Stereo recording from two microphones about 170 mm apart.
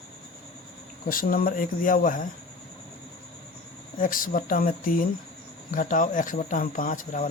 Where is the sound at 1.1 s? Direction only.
55° left (ahead or behind).